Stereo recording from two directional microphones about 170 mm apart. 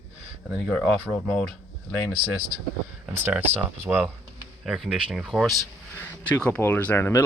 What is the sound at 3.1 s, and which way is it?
Speech, 10° right (ahead or behind).